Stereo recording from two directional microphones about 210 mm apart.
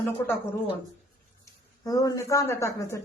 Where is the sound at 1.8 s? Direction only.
15° left (ahead or behind).